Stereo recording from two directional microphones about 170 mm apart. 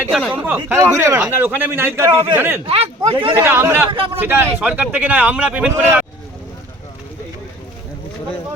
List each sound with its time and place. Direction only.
0.1 s speech: centre (ahead or behind)
0.4 s speech: 10° right (ahead or behind)
2.6 s speech: 35° right (ahead or behind)
3.3 s speech: 15° right (ahead or behind)